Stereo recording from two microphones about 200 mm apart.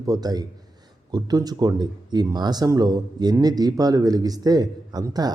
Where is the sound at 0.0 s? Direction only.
20° right (ahead or behind).